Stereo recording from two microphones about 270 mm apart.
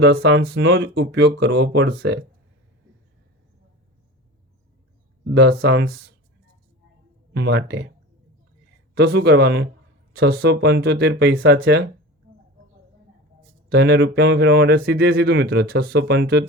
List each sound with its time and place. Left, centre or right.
0.0 s speech: right
5.3 s speech: right
7.3 s speech: right
9.0 s speech: right
13.7 s speech: right